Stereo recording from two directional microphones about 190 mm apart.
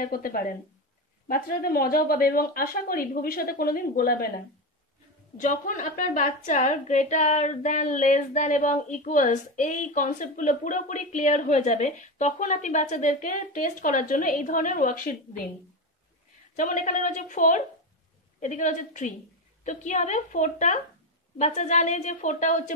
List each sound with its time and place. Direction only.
0.0 s speech: 50° left (ahead or behind)
5.4 s a woman's voice: 45° left (ahead or behind)
16.5 s a woman's voice: 40° left (ahead or behind)